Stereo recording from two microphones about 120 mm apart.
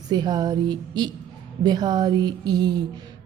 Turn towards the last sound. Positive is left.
turn(degrees=-35)  # may be behind; listen again after turning